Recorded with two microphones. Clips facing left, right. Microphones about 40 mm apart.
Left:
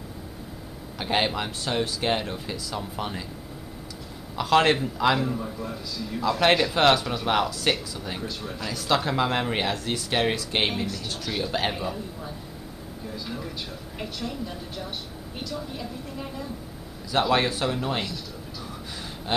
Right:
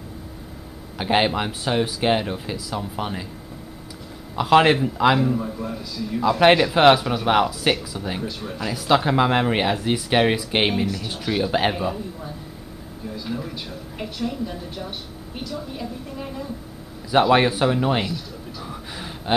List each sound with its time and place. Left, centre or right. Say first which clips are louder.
0.9 s speech: right 5 dB; centre
4.4 s a man's voice: right 5 dB; centre
18.6 s music: right 4 dB; centre